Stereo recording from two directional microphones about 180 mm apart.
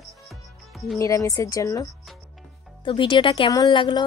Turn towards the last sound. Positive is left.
turn(degrees=25)  # may be behind; listen again after turning